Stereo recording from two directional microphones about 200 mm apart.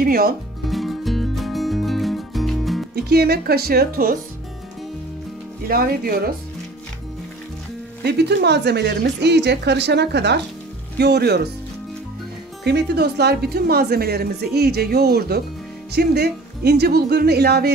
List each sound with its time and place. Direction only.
0.0 s speech: 50° right (ahead or behind)
0.7 s music: centre (ahead or behind)
3.0 s speech: 50° right (ahead or behind)
5.7 s speech: 50° right (ahead or behind)
8.0 s a woman's voice: 55° right (ahead or behind)
12.6 s speech: 55° right (ahead or behind)